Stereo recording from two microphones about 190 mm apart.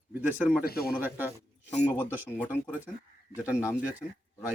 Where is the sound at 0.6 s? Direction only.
50° left (ahead or behind).